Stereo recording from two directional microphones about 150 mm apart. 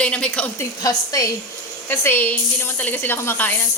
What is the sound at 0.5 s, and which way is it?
A woman's voice, 20° left (ahead or behind).